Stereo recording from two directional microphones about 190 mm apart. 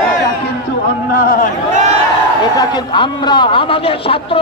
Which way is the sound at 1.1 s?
50° left (ahead or behind).